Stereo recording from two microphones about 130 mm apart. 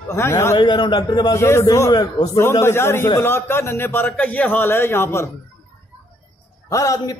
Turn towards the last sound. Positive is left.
turn(degrees=25)  # may be behind; listen again after turning